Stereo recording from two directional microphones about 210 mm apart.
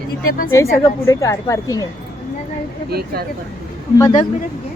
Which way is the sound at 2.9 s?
45° right (ahead or behind).